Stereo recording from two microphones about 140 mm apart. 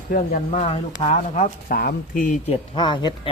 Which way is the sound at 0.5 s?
45° left (ahead or behind).